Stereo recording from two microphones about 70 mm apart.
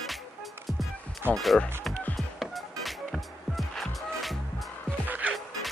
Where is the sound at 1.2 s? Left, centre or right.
Right.